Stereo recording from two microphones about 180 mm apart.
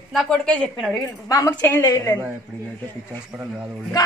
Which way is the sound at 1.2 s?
20° left (ahead or behind).